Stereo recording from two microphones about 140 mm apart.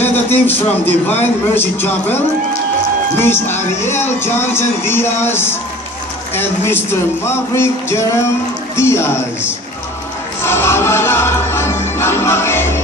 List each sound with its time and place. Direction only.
0.0 s speech: 15° left (ahead or behind)
3.2 s speech: 15° left (ahead or behind)
10.4 s music: 15° left (ahead or behind)